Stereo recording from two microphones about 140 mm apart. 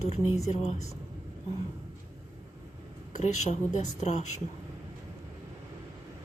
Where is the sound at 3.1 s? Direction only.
55° left (ahead or behind).